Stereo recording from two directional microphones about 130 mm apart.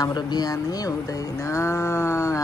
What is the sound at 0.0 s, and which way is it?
Speech, 30° left (ahead or behind).